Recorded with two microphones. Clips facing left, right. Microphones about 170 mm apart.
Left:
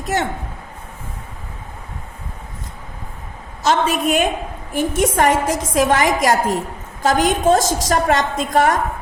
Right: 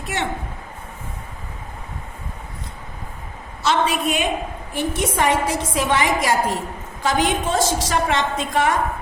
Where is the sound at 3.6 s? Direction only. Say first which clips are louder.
Left 3 dB; 40° left (ahead or behind).